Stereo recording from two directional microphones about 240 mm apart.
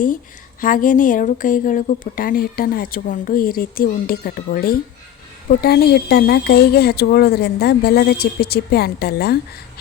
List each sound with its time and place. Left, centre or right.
0.6 s a woman's voice: left